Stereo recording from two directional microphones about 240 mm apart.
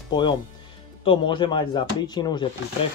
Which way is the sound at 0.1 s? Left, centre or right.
Centre.